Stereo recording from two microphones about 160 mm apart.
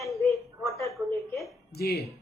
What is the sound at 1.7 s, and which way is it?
Speech, 85° left.